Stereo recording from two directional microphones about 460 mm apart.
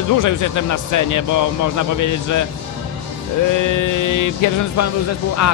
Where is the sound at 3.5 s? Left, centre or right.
Left.